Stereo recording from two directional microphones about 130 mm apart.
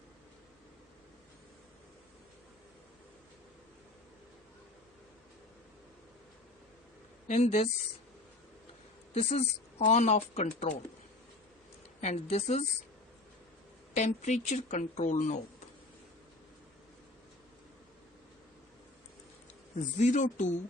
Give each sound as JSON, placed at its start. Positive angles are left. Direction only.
{"t": 7.3, "sound": "speech", "side_deg": 65}
{"t": 9.1, "sound": "speech", "side_deg": 55}
{"t": 11.9, "sound": "speech", "side_deg": 60}
{"t": 13.9, "sound": "speech", "side_deg": 60}
{"t": 20.0, "sound": "speech", "side_deg": 65}